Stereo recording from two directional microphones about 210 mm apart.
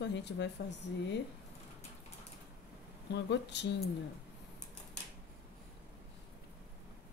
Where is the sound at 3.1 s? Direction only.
55° left (ahead or behind).